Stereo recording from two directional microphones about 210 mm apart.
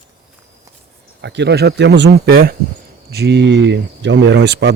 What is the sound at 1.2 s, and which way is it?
Speech, 55° right (ahead or behind).